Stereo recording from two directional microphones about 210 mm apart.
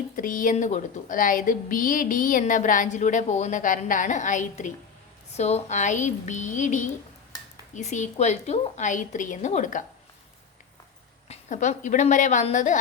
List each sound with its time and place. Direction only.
0.2 s a woman's voice: 40° left (ahead or behind)
11.3 s a woman's voice: 35° left (ahead or behind)